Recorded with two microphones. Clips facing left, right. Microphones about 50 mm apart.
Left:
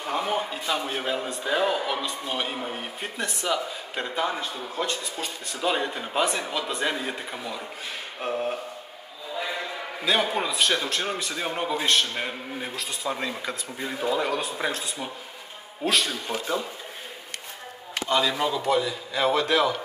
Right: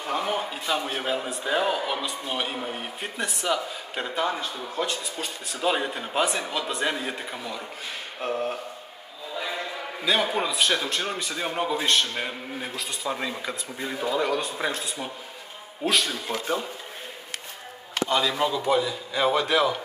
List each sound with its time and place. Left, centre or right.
0.0 s a man's voice: centre
8.2 s a sound: centre
9.4 s a man's voice: centre
18.0 s a man's voice: centre